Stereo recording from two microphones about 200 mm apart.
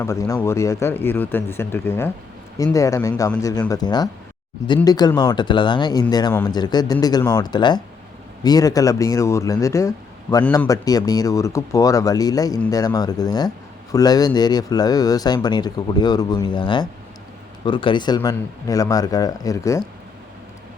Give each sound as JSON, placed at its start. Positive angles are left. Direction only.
{"t": 0.0, "sound": "speech", "side_deg": 15}